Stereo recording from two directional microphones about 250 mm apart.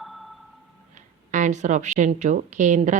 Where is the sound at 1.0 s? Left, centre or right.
Right.